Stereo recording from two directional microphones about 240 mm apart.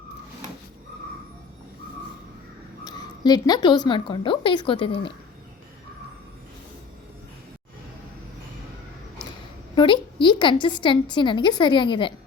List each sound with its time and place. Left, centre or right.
2.8 s a woman's voice: centre
9.7 s a woman's voice: centre